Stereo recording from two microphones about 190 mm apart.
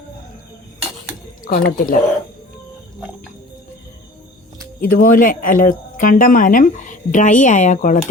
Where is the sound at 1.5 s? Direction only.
50° left (ahead or behind).